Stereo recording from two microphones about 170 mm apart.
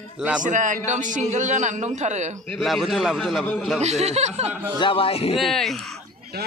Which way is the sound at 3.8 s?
40° right (ahead or behind).